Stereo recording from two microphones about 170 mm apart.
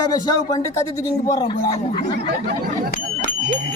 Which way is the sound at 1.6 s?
35° left (ahead or behind).